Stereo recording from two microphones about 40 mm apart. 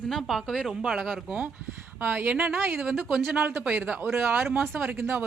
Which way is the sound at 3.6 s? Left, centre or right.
Centre.